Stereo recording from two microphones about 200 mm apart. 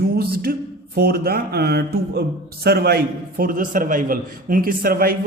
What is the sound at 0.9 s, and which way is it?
A man's voice, 50° right (ahead or behind).